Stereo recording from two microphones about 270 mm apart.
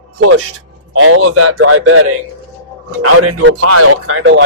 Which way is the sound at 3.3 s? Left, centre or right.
Right.